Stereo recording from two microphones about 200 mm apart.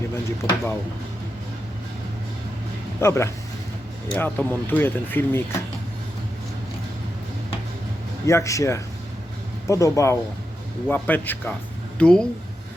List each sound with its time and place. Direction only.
0.3 s speech: 10° left (ahead or behind)
3.0 s speech: 15° left (ahead or behind)
8.3 s speech: 15° left (ahead or behind)